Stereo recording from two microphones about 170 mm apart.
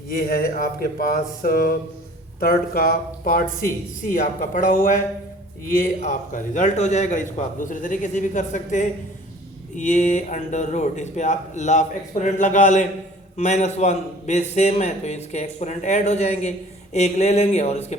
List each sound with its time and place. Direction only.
0.1 s a man's voice: 60° left (ahead or behind); by 17.9 s 40° left (ahead or behind)